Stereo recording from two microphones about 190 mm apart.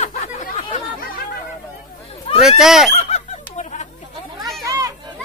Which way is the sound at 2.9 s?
35° left (ahead or behind).